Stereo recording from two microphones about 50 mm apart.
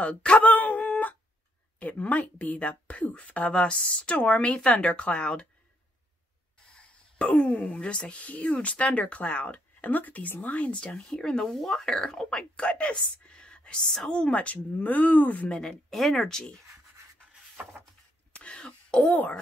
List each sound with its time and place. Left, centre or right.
0.0 s a sound: left
1.8 s speech: left
7.2 s speech: left
10.8 s speech: centre; by 15.4 s left
15.4 s speech: centre
15.9 s speech: centre
16.3 s speech: centre
18.3 s a sound: left